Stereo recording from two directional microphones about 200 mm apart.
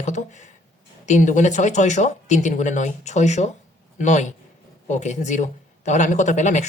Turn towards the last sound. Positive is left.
turn(degrees=35)  # may be behind; listen again after turning